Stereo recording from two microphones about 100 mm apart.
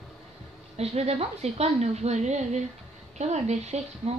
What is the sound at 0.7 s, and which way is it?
A woman's voice, 90° right.